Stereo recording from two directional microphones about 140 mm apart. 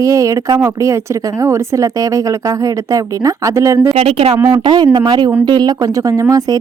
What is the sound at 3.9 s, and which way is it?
Speech, 45° right (ahead or behind).